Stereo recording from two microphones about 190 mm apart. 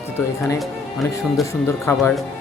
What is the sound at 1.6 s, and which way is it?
Speech, 10° left (ahead or behind).